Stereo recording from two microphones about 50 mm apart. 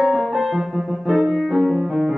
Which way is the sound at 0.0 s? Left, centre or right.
Centre.